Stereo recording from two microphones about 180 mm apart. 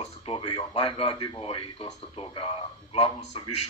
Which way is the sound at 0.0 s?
30° left (ahead or behind).